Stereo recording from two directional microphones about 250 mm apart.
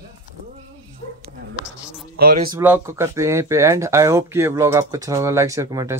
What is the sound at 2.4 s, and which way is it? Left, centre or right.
Speech, centre.